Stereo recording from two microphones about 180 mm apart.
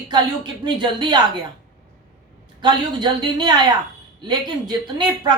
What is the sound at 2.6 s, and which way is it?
Speech, 25° right (ahead or behind).